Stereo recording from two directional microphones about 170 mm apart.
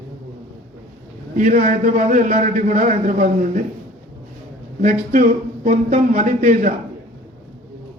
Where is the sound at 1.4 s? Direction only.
55° right (ahead or behind).